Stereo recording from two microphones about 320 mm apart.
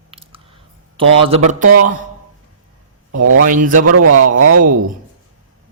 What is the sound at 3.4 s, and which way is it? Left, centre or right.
Speech, right.